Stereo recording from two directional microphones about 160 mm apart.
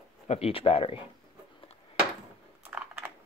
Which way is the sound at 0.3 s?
35° left (ahead or behind).